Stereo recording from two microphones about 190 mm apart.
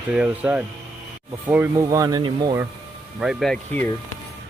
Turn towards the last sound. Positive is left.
turn(degrees=5)  # may be behind; listen again after turning